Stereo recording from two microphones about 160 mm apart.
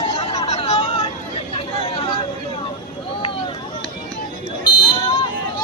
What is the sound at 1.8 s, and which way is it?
Chatter, 30° left (ahead or behind).